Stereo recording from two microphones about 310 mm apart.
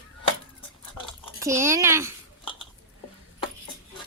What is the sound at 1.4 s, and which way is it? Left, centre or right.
Speech, centre.